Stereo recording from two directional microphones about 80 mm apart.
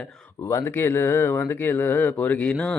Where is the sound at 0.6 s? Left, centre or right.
Left.